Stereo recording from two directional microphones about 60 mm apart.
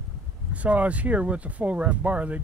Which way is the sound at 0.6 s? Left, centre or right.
Right.